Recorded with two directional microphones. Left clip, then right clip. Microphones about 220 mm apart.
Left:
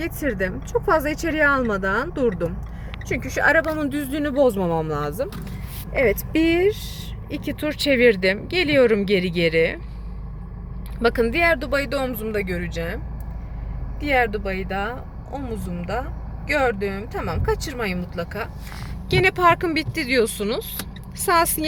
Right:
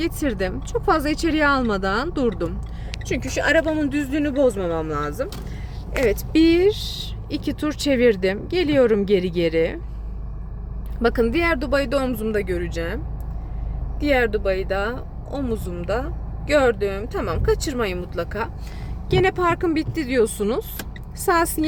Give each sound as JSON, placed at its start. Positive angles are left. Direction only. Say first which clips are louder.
{"t": 0.0, "sound": "speech", "louder": "right 1 dB", "side_deg": -10}
{"t": 4.2, "sound": "speech", "louder": "left 1 dB", "side_deg": 20}
{"t": 6.0, "sound": "speech", "louder": "right 1 dB", "side_deg": 5}
{"t": 11.0, "sound": "speech", "louder": "left 1 dB", "side_deg": -15}
{"t": 14.0, "sound": "speech", "louder": "right 1 dB", "side_deg": -25}
{"t": 19.1, "sound": "speech", "louder": "left 2 dB", "side_deg": -5}